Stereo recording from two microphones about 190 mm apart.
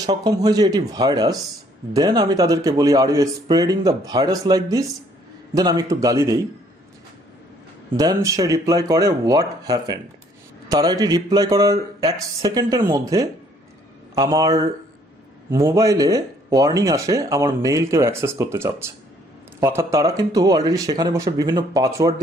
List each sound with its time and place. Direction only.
0.0 s a man's voice: 20° right (ahead or behind)
7.9 s a man's voice: 20° right (ahead or behind)